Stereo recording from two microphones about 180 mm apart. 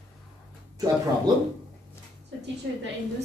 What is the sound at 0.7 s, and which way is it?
Speech, 20° right (ahead or behind).